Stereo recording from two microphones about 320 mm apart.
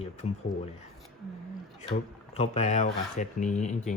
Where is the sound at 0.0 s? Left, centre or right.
Left.